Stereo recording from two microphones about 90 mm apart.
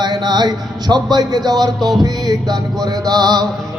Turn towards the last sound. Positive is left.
turn(degrees=-50)  # may be behind; listen again after turning